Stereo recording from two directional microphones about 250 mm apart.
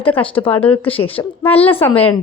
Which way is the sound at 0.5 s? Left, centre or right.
Centre.